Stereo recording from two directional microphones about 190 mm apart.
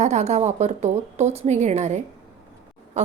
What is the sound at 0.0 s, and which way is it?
Speech, 35° right (ahead or behind).